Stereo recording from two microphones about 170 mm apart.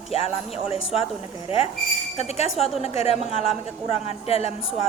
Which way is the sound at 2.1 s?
40° left (ahead or behind).